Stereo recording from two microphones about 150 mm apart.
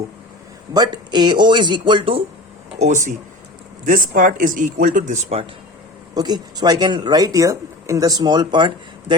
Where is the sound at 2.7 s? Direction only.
55° right (ahead or behind).